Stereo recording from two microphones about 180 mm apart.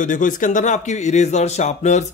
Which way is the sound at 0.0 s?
45° left (ahead or behind).